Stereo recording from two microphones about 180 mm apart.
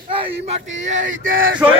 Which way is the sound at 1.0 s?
50° right (ahead or behind).